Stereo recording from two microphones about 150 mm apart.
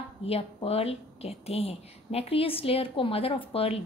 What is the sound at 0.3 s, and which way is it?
Speech, 40° left (ahead or behind).